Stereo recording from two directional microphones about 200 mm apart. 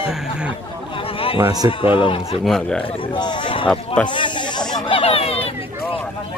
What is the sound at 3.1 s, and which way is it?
Speech, 20° left (ahead or behind).